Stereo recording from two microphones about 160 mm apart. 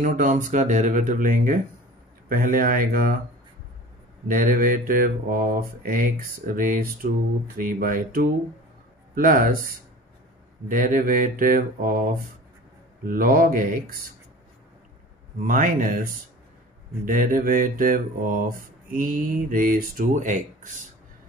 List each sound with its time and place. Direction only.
0.0 s speech: 55° right (ahead or behind)
4.3 s speech: 60° right (ahead or behind)
10.7 s speech: 55° right (ahead or behind)
15.4 s speech: 60° right (ahead or behind)